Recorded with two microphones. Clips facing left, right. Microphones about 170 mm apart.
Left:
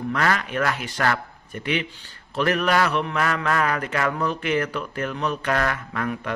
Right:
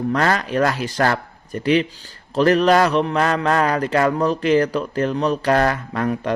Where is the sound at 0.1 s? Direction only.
35° right (ahead or behind).